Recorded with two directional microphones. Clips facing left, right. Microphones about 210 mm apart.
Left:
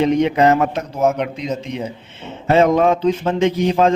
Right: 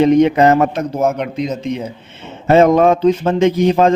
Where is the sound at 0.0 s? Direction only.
45° right (ahead or behind).